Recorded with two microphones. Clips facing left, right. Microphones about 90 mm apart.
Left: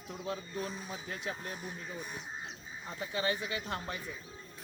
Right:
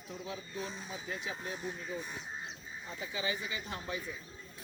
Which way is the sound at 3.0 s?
55° left (ahead or behind).